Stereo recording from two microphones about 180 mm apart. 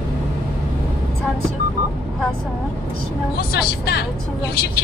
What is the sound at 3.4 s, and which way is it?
Speech, 60° left (ahead or behind).